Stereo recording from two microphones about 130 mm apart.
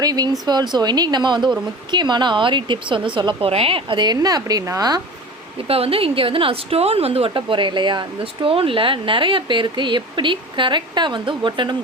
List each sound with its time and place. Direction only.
0.0 s a woman's voice: 30° right (ahead or behind)
5.6 s a woman's voice: 50° right (ahead or behind)